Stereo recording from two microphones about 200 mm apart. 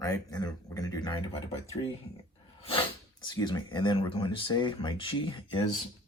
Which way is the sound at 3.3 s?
20° left (ahead or behind).